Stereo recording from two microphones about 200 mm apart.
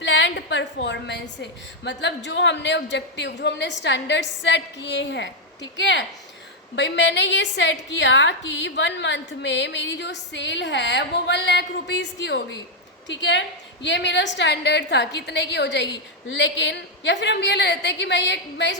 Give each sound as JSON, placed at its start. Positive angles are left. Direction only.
{"t": 0.0, "sound": "a woman's voice", "side_deg": 65}